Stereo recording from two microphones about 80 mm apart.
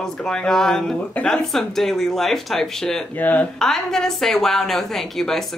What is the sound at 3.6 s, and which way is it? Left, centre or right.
Speech, centre.